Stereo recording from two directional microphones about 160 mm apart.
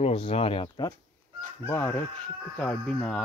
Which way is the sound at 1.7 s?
15° left (ahead or behind).